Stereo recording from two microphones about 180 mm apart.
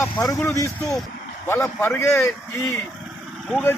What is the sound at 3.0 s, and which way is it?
Vehicle, centre (ahead or behind).